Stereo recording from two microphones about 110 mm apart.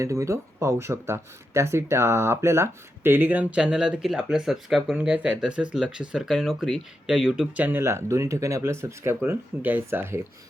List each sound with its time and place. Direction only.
0.0 s speech: 25° right (ahead or behind)